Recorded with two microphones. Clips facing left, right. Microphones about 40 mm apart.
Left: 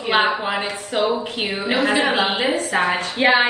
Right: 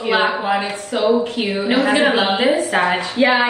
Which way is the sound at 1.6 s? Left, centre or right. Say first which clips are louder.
Right 3 dB; right.